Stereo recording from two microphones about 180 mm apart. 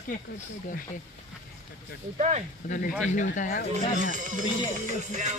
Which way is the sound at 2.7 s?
45° left (ahead or behind).